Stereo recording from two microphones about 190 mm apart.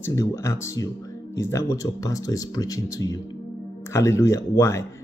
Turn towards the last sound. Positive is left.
turn(degrees=15)  # may be behind; listen again after turning